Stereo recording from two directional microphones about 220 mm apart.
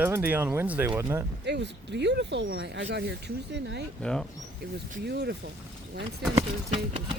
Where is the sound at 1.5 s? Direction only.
50° right (ahead or behind).